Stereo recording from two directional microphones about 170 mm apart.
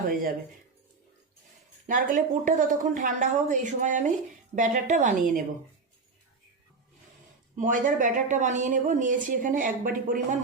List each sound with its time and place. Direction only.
0.1 s speech: 55° right (ahead or behind)
1.9 s speech: 50° right (ahead or behind)
7.5 s speech: 50° right (ahead or behind)